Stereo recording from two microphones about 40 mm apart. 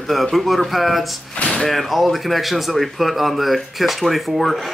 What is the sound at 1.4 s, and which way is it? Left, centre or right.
Speech, left.